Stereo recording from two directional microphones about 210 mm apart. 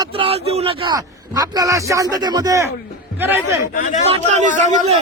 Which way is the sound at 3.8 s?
35° left (ahead or behind).